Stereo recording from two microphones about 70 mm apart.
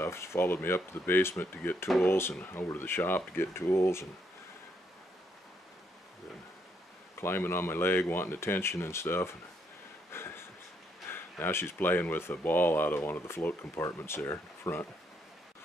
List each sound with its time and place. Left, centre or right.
0.0 s speech: left
7.2 s speech: left
10.1 s a sound: left
11.1 s speech: left
13.6 s speech: left
13.9 s speech: left